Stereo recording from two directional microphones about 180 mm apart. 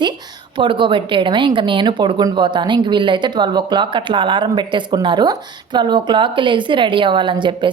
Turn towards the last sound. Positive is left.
turn(degrees=-25)  # may be behind; listen again after turning